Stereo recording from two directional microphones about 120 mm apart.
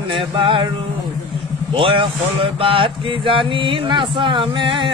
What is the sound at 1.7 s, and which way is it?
Mantra, 45° right (ahead or behind).